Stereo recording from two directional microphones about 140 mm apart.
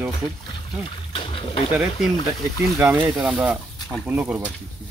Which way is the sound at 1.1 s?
40° left (ahead or behind).